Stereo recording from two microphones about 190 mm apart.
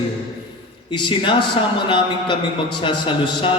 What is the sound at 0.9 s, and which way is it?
Speech, 25° left (ahead or behind).